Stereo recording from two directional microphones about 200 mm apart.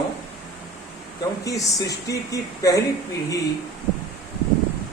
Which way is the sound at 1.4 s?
15° left (ahead or behind).